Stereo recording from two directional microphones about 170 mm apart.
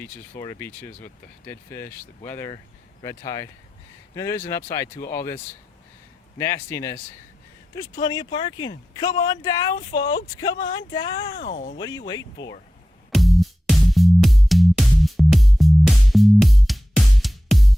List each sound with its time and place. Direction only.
0.0 s speech: 15° left (ahead or behind)
6.4 s speech: 15° left (ahead or behind)
8.0 s speech: 25° left (ahead or behind)
11.3 s speech: 50° left (ahead or behind)
11.8 s speech: 25° left (ahead or behind)
13.1 s music: centre (ahead or behind)